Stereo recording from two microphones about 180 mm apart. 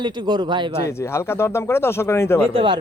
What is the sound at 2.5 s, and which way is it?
Speech, 30° right (ahead or behind).